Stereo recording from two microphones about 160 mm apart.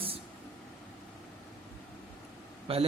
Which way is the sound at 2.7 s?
35° right (ahead or behind).